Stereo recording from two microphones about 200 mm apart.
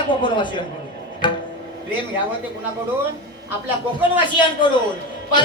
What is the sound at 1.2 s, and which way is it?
Music, 25° left (ahead or behind).